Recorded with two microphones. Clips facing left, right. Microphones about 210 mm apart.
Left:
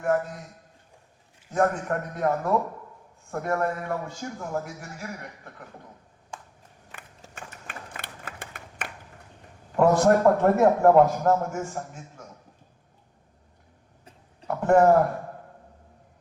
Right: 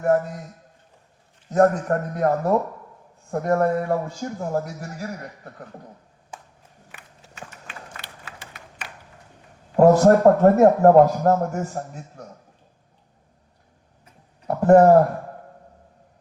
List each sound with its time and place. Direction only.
1.5 s a man's voice: 40° right (ahead or behind)
7.3 s clapping: 50° left (ahead or behind)
9.7 s a man's voice: 35° right (ahead or behind)
14.4 s a sound: 35° right (ahead or behind)